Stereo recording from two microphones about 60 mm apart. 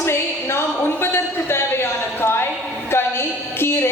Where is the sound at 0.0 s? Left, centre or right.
Left.